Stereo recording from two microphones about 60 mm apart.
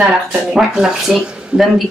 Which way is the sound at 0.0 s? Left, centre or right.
Right.